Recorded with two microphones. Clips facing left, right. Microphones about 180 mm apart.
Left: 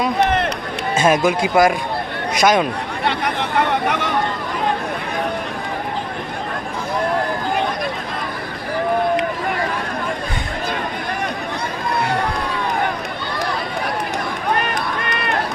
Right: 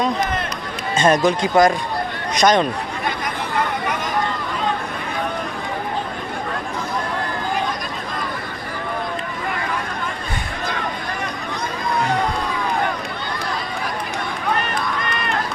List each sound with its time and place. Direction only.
0.2 s run: 70° left (ahead or behind)
0.9 s speech: 5° left (ahead or behind)
3.0 s a sound: 70° left (ahead or behind)
3.8 s vehicle: 70° left (ahead or behind)